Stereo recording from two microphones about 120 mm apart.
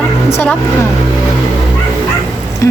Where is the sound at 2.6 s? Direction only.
25° left (ahead or behind).